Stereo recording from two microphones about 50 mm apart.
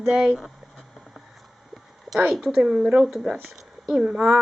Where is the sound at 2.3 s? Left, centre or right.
Centre.